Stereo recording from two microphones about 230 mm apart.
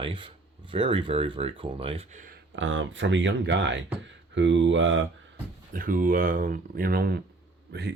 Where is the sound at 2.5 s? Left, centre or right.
Right.